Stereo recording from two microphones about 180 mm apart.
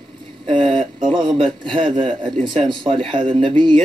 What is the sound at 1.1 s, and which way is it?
Speech, 25° right (ahead or behind).